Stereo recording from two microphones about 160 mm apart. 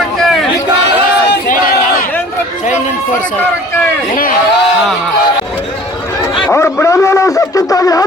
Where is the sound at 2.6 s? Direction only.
55° left (ahead or behind).